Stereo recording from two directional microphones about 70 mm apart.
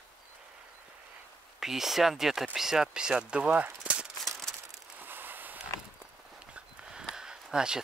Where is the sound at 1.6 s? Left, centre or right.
Centre.